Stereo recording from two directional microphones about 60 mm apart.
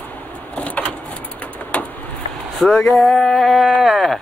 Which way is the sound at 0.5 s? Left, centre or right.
Left.